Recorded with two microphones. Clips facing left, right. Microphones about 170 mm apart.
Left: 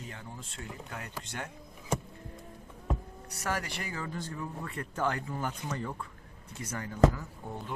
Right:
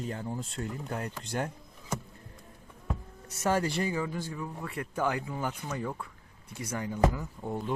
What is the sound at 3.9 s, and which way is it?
Speech, 10° right (ahead or behind).